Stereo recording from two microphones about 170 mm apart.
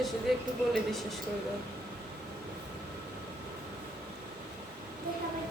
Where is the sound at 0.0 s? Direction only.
Centre (ahead or behind).